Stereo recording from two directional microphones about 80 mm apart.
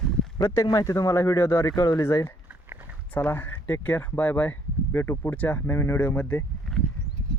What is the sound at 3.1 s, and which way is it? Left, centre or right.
Speech, left.